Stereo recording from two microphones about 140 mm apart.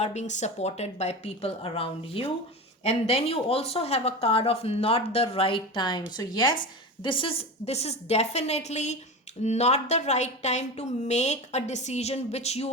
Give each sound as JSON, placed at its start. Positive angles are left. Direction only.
{"t": 0.0, "sound": "a woman's voice", "side_deg": 55}